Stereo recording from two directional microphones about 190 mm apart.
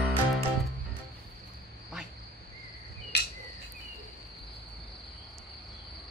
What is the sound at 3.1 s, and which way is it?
Cricket, 60° left (ahead or behind).